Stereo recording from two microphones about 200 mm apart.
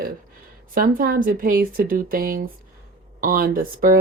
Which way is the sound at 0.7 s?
45° right (ahead or behind).